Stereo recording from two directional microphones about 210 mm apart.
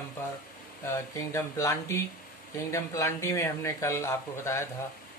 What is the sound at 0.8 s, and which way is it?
Speech, 15° left (ahead or behind).